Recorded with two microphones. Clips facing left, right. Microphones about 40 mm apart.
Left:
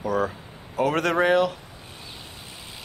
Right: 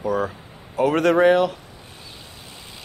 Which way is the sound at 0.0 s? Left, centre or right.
Centre.